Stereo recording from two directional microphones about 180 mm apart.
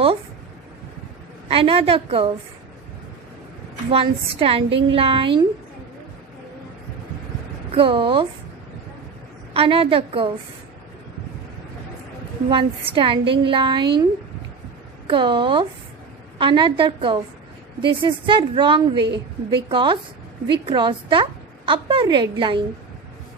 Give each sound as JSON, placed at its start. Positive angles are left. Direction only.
{"t": 1.5, "sound": "a woman's voice", "side_deg": -30}
{"t": 3.9, "sound": "a woman's voice", "side_deg": -30}
{"t": 4.6, "sound": "speech", "side_deg": -90}
{"t": 4.9, "sound": "a woman's voice", "side_deg": -30}
{"t": 7.7, "sound": "a woman's voice", "side_deg": -30}
{"t": 9.5, "sound": "a woman's voice", "side_deg": -30}
{"t": 12.4, "sound": "a woman's voice", "side_deg": -30}
{"t": 15.0, "sound": "a woman's voice", "side_deg": -25}